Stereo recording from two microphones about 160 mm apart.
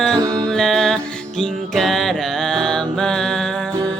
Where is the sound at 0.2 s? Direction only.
25° right (ahead or behind).